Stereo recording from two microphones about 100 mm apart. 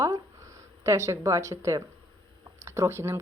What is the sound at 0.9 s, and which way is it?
A woman's voice, 30° right (ahead or behind).